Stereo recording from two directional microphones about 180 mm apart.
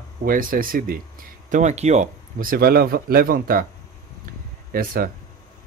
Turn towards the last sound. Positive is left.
turn(degrees=-55)  # may be behind; listen again after turning